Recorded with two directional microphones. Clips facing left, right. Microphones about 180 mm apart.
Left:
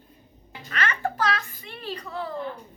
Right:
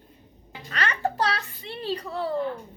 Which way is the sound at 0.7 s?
35° right (ahead or behind).